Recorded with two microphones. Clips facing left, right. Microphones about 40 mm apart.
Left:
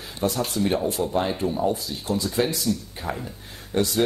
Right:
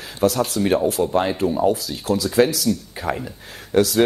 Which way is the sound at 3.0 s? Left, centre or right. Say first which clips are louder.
Right 6 dB; right.